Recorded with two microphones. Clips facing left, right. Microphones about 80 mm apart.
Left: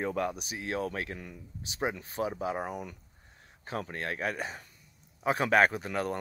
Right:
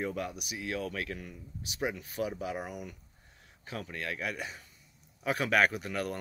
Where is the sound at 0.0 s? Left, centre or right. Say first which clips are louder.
Left 4 dB; left.